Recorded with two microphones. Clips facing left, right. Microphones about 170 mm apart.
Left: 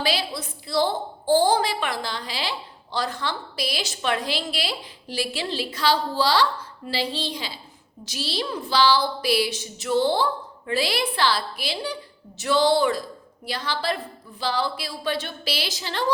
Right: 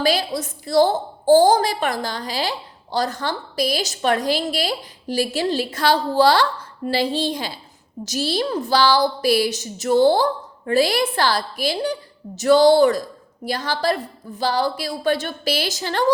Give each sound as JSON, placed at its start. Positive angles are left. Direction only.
{"t": 0.0, "sound": "a woman's voice", "side_deg": -45}